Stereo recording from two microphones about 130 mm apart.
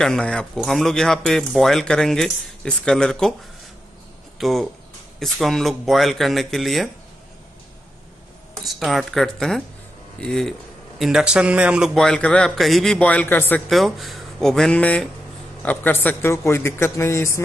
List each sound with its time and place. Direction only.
0.0 s speech: 5° left (ahead or behind)
4.4 s speech: centre (ahead or behind)
8.6 s speech: centre (ahead or behind)
11.9 s a man's voice: 5° left (ahead or behind)
13.7 s a man's voice: centre (ahead or behind); by 17.4 s 20° left (ahead or behind)